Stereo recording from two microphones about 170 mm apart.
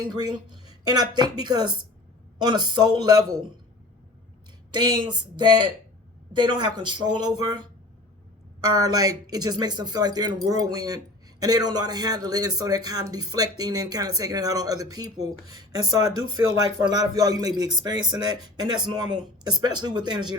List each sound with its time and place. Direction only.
0.0 s speech: 25° right (ahead or behind)
4.7 s speech: 25° right (ahead or behind)